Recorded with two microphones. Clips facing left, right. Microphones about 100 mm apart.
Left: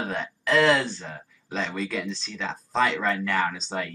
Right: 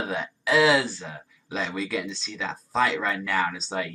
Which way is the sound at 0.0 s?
5° right (ahead or behind).